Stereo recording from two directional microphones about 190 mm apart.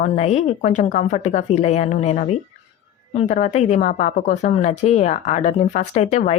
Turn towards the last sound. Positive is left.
turn(degrees=35)  # may be behind; listen again after turning